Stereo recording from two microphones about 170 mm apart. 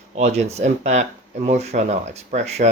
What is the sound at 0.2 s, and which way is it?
Speech, 40° right (ahead or behind).